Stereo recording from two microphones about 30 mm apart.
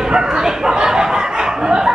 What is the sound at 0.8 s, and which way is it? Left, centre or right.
Chuckle, centre.